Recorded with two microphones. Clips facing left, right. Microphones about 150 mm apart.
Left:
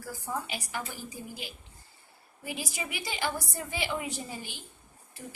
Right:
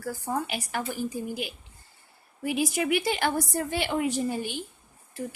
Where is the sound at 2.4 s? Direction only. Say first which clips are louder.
Right 11 dB; 60° right (ahead or behind).